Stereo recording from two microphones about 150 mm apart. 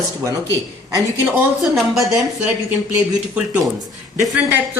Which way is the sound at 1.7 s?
Centre (ahead or behind).